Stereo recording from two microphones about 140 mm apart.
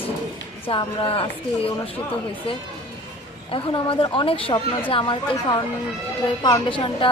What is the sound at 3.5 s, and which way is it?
A woman's voice, 40° left (ahead or behind).